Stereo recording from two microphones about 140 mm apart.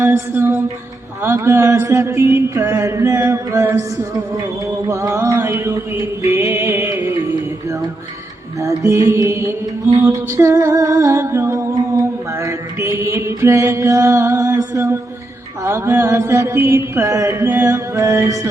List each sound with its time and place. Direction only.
0.0 s music: 15° right (ahead or behind)
1.2 s mantra: 15° right (ahead or behind)
8.6 s mantra: 25° right (ahead or behind)
10.1 s music: 20° right (ahead or behind)
15.6 s mantra: 20° right (ahead or behind)